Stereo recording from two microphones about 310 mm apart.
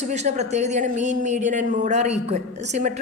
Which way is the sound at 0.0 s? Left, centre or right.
Right.